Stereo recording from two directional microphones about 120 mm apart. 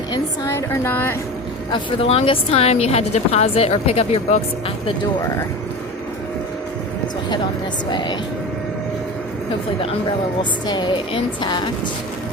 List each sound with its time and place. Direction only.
0.4 s speech: 20° left (ahead or behind)
1.7 s speech: 55° left (ahead or behind)
10.7 s a woman's voice: 40° left (ahead or behind)